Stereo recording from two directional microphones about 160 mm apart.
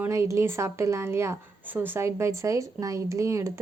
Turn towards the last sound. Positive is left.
turn(degrees=-20)  # may be behind; listen again after turning